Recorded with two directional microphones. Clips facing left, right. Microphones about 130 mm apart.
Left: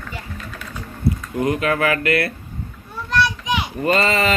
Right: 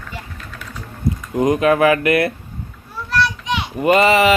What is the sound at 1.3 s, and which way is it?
Speech, 20° right (ahead or behind).